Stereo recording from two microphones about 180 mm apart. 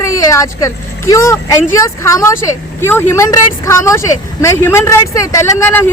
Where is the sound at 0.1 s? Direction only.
15° left (ahead or behind).